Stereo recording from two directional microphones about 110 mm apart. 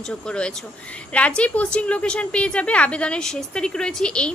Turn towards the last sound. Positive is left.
turn(degrees=10)  # may be behind; listen again after turning